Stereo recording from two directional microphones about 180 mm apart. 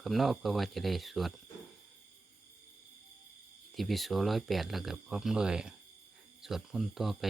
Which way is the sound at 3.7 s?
Centre (ahead or behind).